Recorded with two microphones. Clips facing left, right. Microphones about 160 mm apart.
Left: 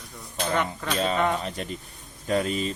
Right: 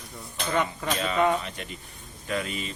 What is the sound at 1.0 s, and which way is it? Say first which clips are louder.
Speech: even; 35° left (ahead or behind).